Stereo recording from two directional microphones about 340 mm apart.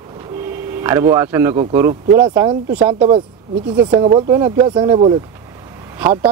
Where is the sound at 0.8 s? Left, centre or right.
Centre.